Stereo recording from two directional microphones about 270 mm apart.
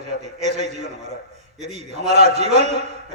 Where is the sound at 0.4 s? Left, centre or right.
Right.